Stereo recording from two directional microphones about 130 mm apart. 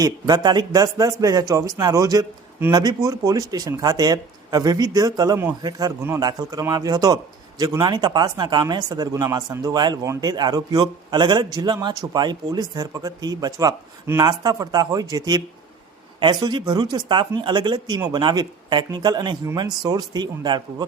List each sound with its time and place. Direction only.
0.0 s speech: 30° right (ahead or behind)